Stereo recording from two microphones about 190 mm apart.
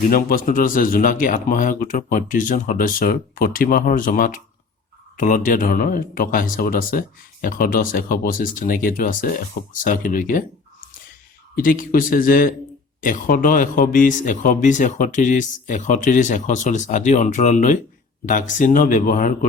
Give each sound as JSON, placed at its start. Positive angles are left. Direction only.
{"t": 0.1, "sound": "speech", "side_deg": 50}
{"t": 11.5, "sound": "speech", "side_deg": 45}